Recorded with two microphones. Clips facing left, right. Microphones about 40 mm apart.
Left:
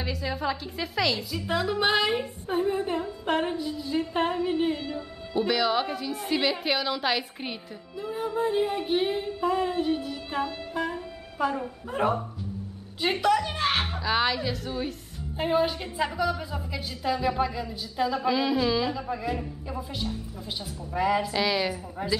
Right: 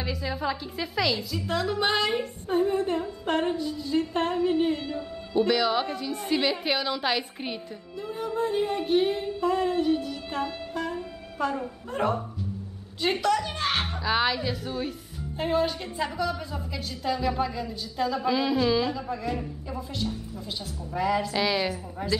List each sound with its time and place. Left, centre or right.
0.0 s female singing: centre
13.0 s a woman's voice: centre